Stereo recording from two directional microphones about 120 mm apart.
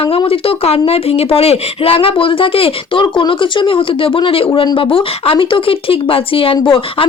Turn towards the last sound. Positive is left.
turn(degrees=45)  # may be behind; listen again after turning